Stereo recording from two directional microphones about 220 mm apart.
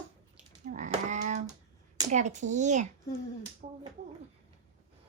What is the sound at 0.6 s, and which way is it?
A woman's voice, 35° right (ahead or behind).